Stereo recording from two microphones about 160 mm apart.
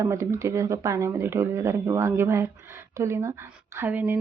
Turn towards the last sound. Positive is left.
turn(degrees=-10)  # may be behind; listen again after turning